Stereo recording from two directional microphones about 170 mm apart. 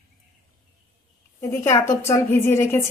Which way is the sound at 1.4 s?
15° left (ahead or behind).